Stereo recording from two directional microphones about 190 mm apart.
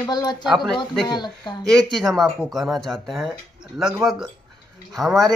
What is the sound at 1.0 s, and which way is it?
Speech, 20° left (ahead or behind).